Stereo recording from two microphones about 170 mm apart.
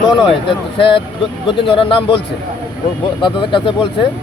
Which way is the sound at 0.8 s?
30° left (ahead or behind).